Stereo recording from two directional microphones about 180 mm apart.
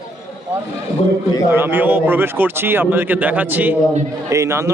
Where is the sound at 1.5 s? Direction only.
10° right (ahead or behind).